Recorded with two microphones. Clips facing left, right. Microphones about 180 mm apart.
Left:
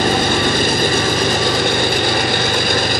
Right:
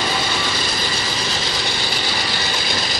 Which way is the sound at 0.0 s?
50° left (ahead or behind).